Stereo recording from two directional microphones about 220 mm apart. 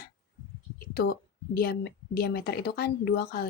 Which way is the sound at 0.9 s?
45° left (ahead or behind).